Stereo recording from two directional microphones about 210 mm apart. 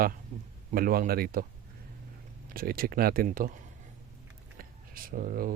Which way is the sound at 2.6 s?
45° right (ahead or behind).